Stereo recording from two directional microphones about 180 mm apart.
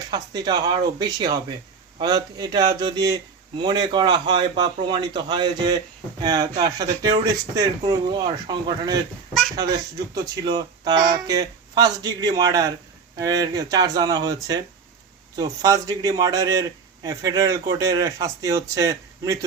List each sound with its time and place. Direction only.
0.1 s a man's voice: 25° right (ahead or behind)